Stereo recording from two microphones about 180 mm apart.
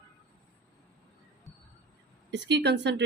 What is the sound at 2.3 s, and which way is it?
Speech, 75° right (ahead or behind).